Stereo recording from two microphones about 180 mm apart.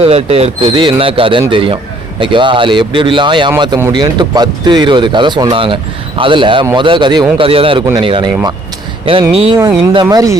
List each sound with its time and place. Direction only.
0.0 s speech: 35° right (ahead or behind)
9.3 s speech: 30° right (ahead or behind)